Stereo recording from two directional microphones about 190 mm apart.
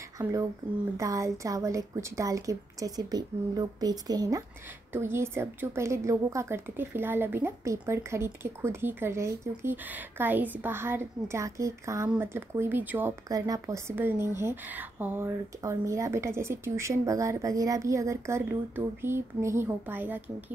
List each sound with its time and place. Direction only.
0.2 s speech: 15° right (ahead or behind)